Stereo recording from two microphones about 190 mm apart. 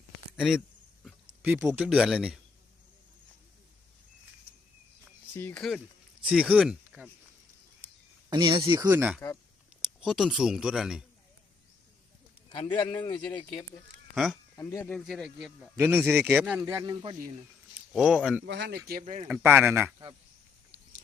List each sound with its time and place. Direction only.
0.3 s speech: centre (ahead or behind)
1.4 s speech: 10° right (ahead or behind)
5.3 s speech: 10° left (ahead or behind); by 7.1 s 5° right (ahead or behind)
8.3 s speech: 25° right (ahead or behind)
9.0 s speech: 5° right (ahead or behind)
12.5 s a man's voice: 25° left (ahead or behind)
14.5 s speech: 15° left (ahead or behind); by 15.7 s centre (ahead or behind)
15.8 s speech: 10° right (ahead or behind)
17.7 s speech: 5° right (ahead or behind)
18.4 s speech: 65° right (ahead or behind)
18.9 s speech: 45° right (ahead or behind)
19.3 s speech: 10° right (ahead or behind)